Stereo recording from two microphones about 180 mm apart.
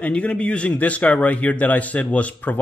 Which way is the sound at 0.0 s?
5° left (ahead or behind).